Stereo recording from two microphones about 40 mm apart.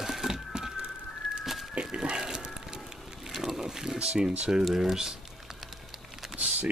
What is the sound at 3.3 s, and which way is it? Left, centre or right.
Boat, centre.